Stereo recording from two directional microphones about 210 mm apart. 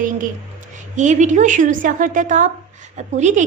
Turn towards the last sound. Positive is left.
turn(degrees=-35)  # may be behind; listen again after turning